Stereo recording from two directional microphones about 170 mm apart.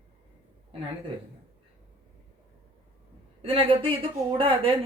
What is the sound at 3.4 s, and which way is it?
Speech, 30° right (ahead or behind).